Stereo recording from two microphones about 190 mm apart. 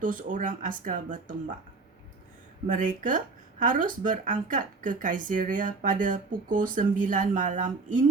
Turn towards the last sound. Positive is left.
turn(degrees=-40)  # may be behind; listen again after turning